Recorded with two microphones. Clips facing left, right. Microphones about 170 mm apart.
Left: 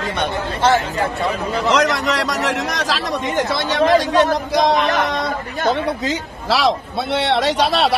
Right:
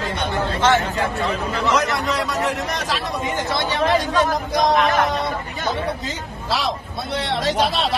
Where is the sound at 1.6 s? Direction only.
85° left.